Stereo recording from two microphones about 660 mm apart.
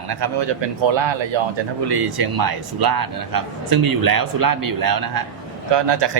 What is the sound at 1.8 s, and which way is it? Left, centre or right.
Speech, right.